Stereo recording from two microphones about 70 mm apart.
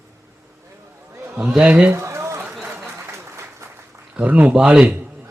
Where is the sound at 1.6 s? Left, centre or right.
Centre.